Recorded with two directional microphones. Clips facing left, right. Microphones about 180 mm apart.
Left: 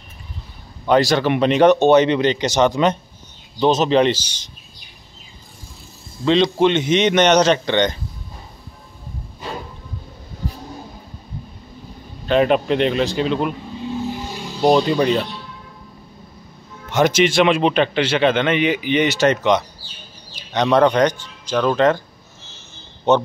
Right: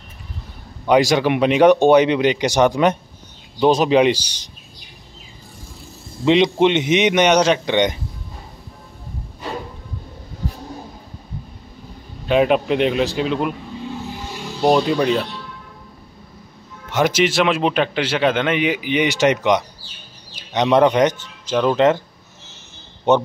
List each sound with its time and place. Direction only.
0.8 s a man's voice: 15° right (ahead or behind)
6.2 s a man's voice: 20° right (ahead or behind)
12.3 s speech: 5° right (ahead or behind)
14.6 s speech: 5° right (ahead or behind)
16.9 s a man's voice: 5° right (ahead or behind)
23.1 s a man's voice: 15° right (ahead or behind)